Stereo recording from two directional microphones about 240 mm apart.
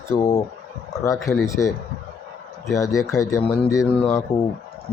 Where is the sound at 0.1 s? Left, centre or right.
Centre.